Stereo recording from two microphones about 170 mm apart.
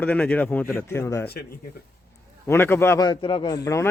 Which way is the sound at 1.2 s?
70° left (ahead or behind).